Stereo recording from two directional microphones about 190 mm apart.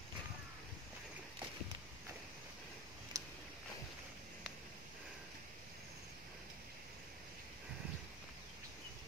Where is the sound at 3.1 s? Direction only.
15° right (ahead or behind).